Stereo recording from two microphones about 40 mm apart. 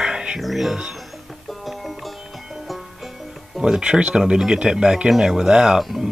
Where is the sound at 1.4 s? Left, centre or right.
Centre.